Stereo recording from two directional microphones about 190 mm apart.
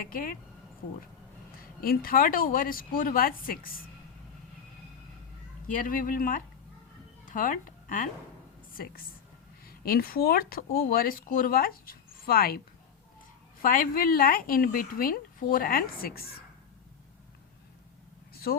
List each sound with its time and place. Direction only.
0.1 s speech: 45° left (ahead or behind)
1.8 s speech: 50° left (ahead or behind)
5.6 s a woman's voice: 45° left (ahead or behind)
13.6 s speech: 45° left (ahead or behind)
18.5 s speech: 50° left (ahead or behind)